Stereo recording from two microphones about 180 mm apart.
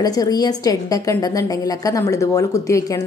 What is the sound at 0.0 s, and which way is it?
A woman's voice, 20° left (ahead or behind).